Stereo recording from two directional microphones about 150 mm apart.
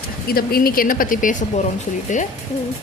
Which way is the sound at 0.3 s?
85° left.